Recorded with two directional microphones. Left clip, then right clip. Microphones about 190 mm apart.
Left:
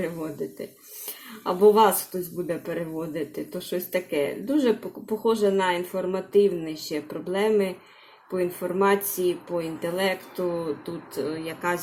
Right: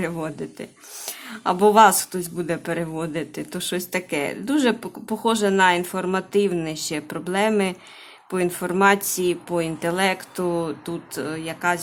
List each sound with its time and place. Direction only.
1.5 s speech: 20° right (ahead or behind)